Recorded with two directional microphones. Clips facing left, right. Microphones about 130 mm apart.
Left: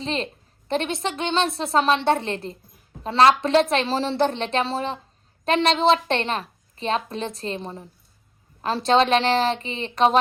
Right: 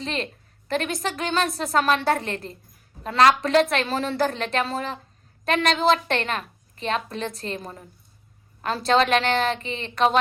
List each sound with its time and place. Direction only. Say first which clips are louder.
0.0 s a woman's voice: left 2 dB; 30° left (ahead or behind)
8.9 s a woman's voice: left 2 dB; 30° left (ahead or behind)